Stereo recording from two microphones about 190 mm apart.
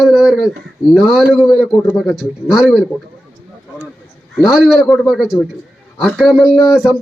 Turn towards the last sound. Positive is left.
turn(degrees=-5)  # may be behind; listen again after turning